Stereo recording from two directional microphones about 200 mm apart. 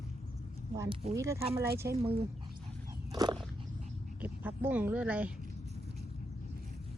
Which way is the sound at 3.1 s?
20° right (ahead or behind).